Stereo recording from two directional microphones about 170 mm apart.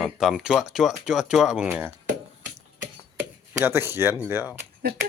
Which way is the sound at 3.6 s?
15° right (ahead or behind).